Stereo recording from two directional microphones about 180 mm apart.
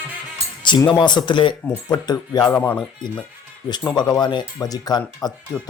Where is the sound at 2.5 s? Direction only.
10° left (ahead or behind).